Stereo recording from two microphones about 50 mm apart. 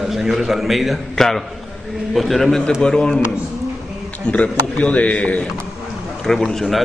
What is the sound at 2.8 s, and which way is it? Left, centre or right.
Speech, centre.